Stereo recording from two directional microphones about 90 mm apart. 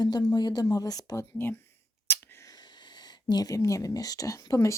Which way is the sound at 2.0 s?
25° left (ahead or behind).